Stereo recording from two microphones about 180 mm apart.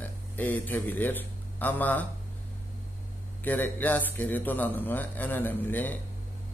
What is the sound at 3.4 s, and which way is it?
Speech, 10° left (ahead or behind).